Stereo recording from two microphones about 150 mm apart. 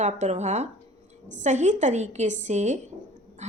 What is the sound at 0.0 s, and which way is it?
A woman's voice, 50° right (ahead or behind).